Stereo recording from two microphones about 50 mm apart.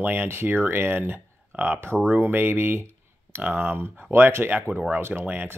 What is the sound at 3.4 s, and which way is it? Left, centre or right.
Speech, right.